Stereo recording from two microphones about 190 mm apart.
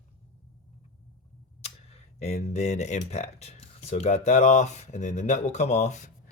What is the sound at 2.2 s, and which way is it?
Speech, 35° left (ahead or behind).